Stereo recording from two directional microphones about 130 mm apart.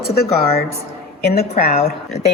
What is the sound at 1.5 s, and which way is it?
Speech, 55° left (ahead or behind).